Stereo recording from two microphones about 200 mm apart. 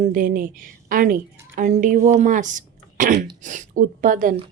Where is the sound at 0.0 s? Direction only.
45° right (ahead or behind).